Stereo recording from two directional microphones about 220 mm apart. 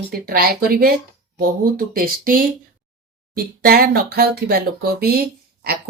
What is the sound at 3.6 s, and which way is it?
Speech, 45° right (ahead or behind).